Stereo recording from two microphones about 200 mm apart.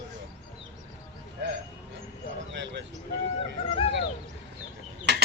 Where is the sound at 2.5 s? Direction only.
60° right (ahead or behind).